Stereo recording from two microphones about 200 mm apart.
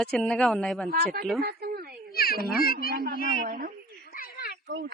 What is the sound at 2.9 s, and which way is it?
Speech, 50° right (ahead or behind).